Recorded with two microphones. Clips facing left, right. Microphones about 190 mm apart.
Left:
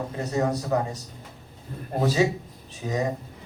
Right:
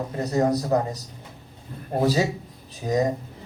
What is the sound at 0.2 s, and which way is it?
Speech, 35° right (ahead or behind).